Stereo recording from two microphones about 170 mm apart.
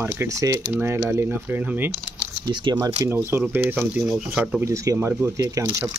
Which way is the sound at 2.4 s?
25° right (ahead or behind).